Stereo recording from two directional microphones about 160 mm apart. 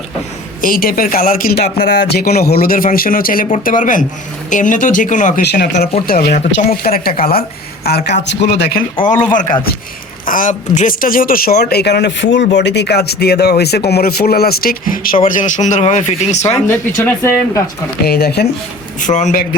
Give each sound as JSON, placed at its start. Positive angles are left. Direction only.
{"t": 0.6, "sound": "speech", "side_deg": 65}
{"t": 6.1, "sound": "speech", "side_deg": 65}
{"t": 7.9, "sound": "speech", "side_deg": 85}
{"t": 9.3, "sound": "speech", "side_deg": 55}
{"t": 11.7, "sound": "speech", "side_deg": 90}
{"t": 15.4, "sound": "speech", "side_deg": 50}
{"t": 17.0, "sound": "speech", "side_deg": 15}
{"t": 18.0, "sound": "speech", "side_deg": 85}
{"t": 18.9, "sound": "speech", "side_deg": 50}